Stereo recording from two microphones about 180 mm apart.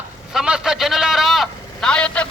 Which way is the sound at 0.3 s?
5° right (ahead or behind).